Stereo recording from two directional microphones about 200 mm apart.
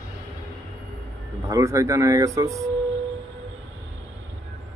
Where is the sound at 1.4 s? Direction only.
15° right (ahead or behind).